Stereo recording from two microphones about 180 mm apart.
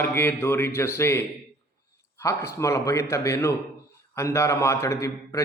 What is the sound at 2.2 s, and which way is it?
Mantra, 15° left (ahead or behind).